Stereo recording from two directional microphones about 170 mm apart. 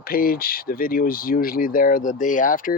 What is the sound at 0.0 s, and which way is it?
Speech, 60° left (ahead or behind).